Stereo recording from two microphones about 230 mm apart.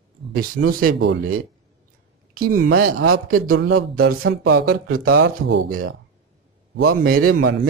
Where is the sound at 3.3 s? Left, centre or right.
Right.